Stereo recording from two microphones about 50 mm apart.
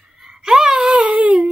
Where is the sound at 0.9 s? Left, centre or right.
Right.